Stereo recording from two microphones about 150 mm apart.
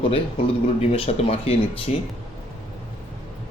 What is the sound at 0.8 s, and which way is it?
Speech, 40° left (ahead or behind).